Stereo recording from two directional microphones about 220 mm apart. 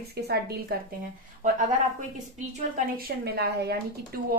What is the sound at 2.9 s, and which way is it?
Speech, 45° right (ahead or behind).